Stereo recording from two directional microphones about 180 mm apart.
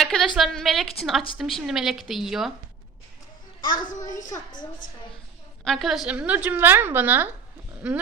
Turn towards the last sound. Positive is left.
turn(degrees=-5)  # may be behind; listen again after turning